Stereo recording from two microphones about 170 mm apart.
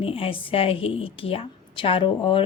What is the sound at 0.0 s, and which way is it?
A woman's voice, 35° left (ahead or behind).